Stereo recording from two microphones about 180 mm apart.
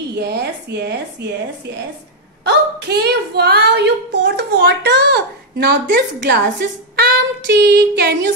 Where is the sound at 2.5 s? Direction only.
65° right (ahead or behind).